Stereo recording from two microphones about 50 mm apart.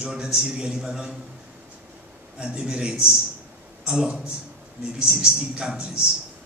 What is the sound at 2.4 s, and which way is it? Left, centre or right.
A man's voice, centre.